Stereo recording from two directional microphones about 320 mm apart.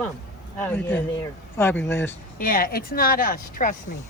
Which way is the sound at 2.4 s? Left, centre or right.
Left.